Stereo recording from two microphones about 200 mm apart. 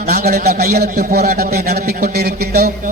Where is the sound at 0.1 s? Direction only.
50° right (ahead or behind).